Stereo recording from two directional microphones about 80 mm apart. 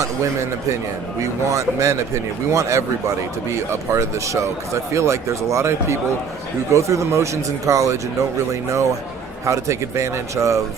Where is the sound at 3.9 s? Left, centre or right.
Right.